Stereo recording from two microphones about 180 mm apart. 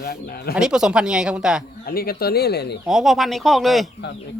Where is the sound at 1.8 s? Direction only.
55° left (ahead or behind).